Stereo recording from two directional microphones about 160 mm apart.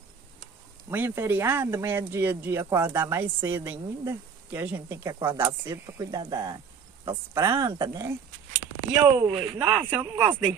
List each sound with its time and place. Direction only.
0.8 s speech: 15° right (ahead or behind)